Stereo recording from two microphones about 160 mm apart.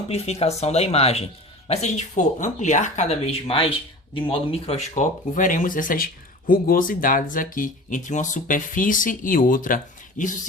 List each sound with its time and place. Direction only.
0.1 s speech: 40° left (ahead or behind)